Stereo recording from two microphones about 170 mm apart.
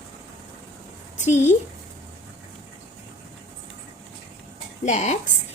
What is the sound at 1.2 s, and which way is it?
Speech, 45° left (ahead or behind).